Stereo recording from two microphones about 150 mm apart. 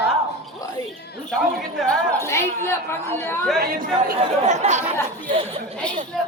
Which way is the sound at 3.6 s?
70° right (ahead or behind).